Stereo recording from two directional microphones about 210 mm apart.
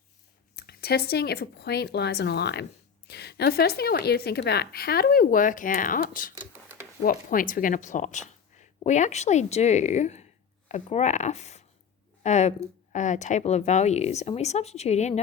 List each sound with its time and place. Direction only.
0.5 s a woman's voice: 50° left (ahead or behind); by 15.2 s 30° left (ahead or behind)